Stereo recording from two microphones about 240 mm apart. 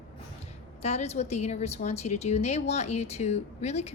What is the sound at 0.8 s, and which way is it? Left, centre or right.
A woman's voice, left.